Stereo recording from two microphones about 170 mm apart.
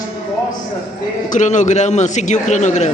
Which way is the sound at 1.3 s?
45° left (ahead or behind).